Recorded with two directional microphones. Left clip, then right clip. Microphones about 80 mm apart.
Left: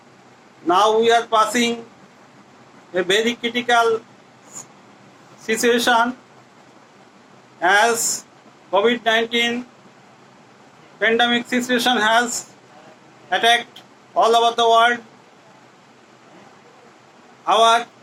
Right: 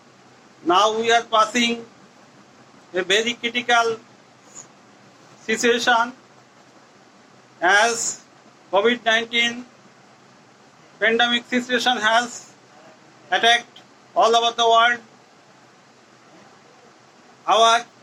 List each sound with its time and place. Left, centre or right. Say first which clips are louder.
0.7 s a man's voice: left 2 dB; left
2.9 s a man's voice: left 2 dB; left
5.4 s a man's voice: left 2 dB; left
7.6 s a man's voice: left 1 dB; left
11.0 s a man's voice: left 1 dB; left
17.4 s speech: left 1 dB; left